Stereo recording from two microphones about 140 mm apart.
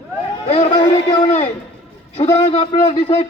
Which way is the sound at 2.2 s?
45° left (ahead or behind).